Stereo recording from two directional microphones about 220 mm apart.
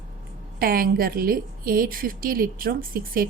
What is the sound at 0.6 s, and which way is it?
A woman's voice, 40° right (ahead or behind).